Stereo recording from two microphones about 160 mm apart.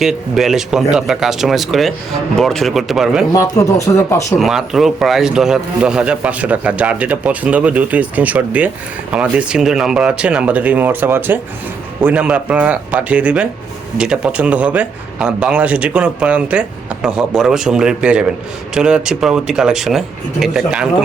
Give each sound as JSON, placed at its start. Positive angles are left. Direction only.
{"t": 0.0, "sound": "speech", "side_deg": 0}
{"t": 3.3, "sound": "speech", "side_deg": 20}
{"t": 4.4, "sound": "a man's voice", "side_deg": 0}